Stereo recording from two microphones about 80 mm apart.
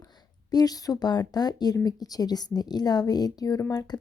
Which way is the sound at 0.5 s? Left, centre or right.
Left.